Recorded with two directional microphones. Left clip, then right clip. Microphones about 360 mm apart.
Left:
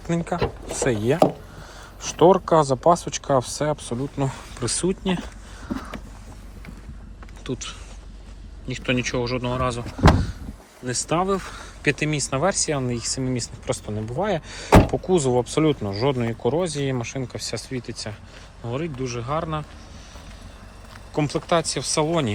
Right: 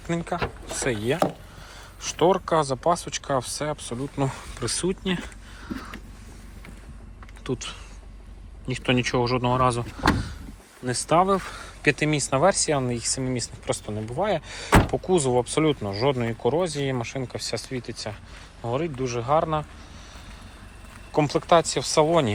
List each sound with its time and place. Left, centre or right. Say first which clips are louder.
0.3 s speech: left 3 dB; left
0.8 s speech: left 5 dB; centre
3.9 s speech: left 1 dB; centre
7.4 s speech: even; centre
10.8 s speech: right 2 dB; centre
21.1 s speech: right 3 dB; centre